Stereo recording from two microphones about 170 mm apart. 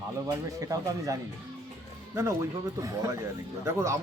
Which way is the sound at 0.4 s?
20° right (ahead or behind).